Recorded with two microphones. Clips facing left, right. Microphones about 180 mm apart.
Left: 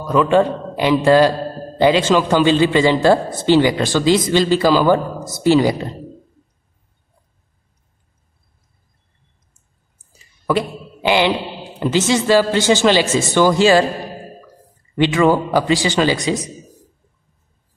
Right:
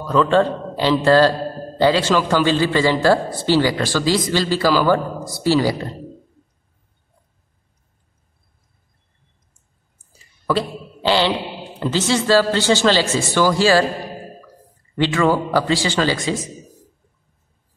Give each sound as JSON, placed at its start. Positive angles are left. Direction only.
{"t": 0.0, "sound": "a man's voice", "side_deg": 15}
{"t": 10.4, "sound": "speech", "side_deg": 15}
{"t": 15.0, "sound": "speech", "side_deg": 15}